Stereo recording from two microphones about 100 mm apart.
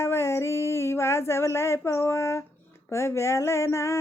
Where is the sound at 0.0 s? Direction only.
25° left (ahead or behind).